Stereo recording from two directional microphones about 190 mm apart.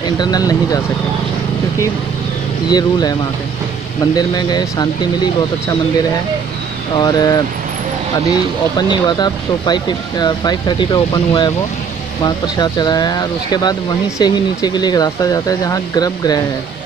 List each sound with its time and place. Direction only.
0.2 s speech: 20° left (ahead or behind)
2.7 s speech: 20° left (ahead or behind)
7.0 s speech: 20° left (ahead or behind)
8.7 s speech: 20° left (ahead or behind)